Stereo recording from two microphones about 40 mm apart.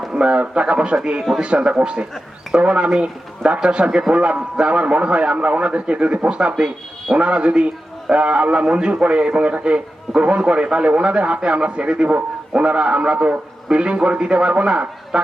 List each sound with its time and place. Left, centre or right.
0.1 s a man's voice: right